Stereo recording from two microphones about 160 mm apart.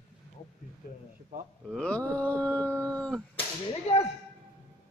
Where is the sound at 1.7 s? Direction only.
5° left (ahead or behind).